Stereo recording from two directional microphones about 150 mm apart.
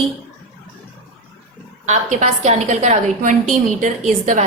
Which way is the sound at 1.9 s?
50° right (ahead or behind).